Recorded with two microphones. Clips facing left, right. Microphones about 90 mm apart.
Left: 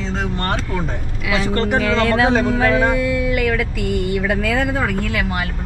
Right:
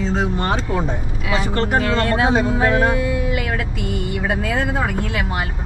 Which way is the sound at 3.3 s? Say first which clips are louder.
Left 4 dB; 20° right (ahead or behind).